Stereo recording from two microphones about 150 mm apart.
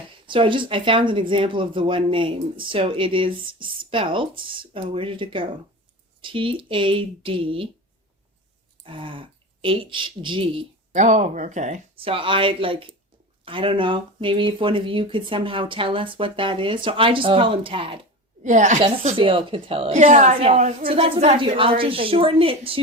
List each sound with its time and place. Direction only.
0.3 s speech: 35° right (ahead or behind)
8.8 s speech: 35° right (ahead or behind)
10.9 s speech: 55° right (ahead or behind)
11.9 s speech: 35° right (ahead or behind)
18.4 s a woman's voice: 55° right (ahead or behind)
19.1 s speech: 35° right (ahead or behind)
20.0 s speech: 55° right (ahead or behind); by 22.8 s 40° right (ahead or behind)